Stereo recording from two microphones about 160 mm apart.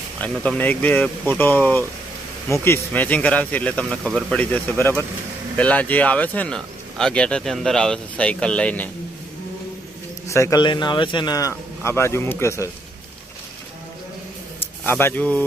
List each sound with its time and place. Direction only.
0.2 s speech: 5° left (ahead or behind)
10.2 s a man's voice: 20° left (ahead or behind)
14.8 s speech: 15° left (ahead or behind)